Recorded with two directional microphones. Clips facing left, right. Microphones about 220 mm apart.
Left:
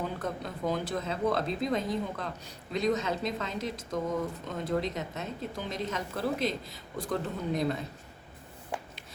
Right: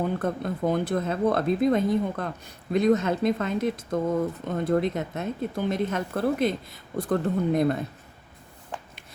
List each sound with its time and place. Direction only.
0.0 s a woman's voice: 55° right (ahead or behind)